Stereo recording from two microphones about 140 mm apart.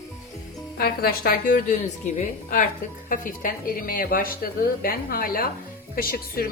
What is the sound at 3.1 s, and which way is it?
Speech, 85° left.